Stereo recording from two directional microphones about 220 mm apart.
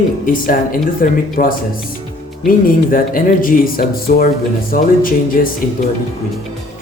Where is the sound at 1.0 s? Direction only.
40° left (ahead or behind).